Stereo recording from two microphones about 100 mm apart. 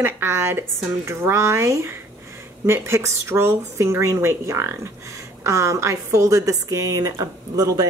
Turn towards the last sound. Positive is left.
turn(degrees=-35)  # may be behind; listen again after turning